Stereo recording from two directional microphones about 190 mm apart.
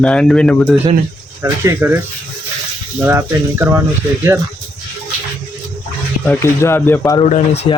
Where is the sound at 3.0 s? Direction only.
10° right (ahead or behind).